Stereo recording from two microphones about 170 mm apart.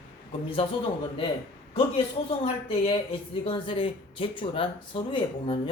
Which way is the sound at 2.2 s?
30° left (ahead or behind).